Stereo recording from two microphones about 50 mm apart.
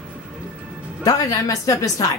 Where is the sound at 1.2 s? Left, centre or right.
Left.